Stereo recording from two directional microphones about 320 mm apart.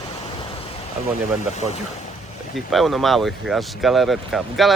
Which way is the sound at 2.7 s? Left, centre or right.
Centre.